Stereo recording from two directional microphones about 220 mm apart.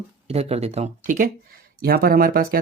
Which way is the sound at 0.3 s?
30° right (ahead or behind).